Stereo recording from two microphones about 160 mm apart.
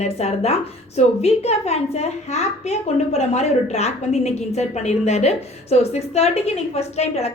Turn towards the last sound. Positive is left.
turn(degrees=40)  # may be behind; listen again after turning